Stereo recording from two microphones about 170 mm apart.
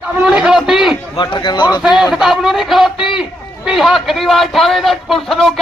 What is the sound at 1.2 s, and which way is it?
Speech, 25° left (ahead or behind).